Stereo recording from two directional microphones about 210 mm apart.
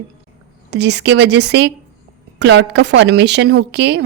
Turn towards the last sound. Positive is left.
turn(degrees=-55)  # may be behind; listen again after turning